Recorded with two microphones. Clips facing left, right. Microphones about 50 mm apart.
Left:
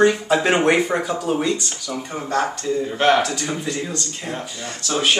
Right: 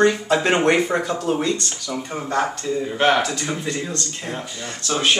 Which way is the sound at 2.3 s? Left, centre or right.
Centre.